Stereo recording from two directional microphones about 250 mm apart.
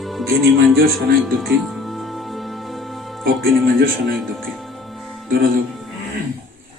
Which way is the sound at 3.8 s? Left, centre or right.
Right.